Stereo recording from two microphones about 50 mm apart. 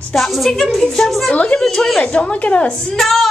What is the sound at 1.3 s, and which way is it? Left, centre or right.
A woman's voice, centre.